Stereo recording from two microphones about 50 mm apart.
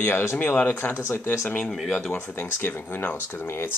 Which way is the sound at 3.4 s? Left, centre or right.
Left.